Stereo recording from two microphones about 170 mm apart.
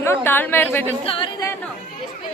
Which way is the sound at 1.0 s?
30° left (ahead or behind).